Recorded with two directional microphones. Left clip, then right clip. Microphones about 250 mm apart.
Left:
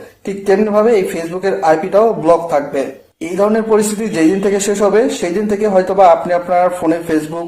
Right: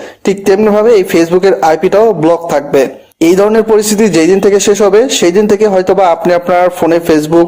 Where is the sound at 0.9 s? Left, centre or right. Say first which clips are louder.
Right 8 dB; right.